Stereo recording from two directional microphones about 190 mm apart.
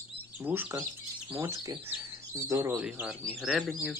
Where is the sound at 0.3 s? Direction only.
10° right (ahead or behind).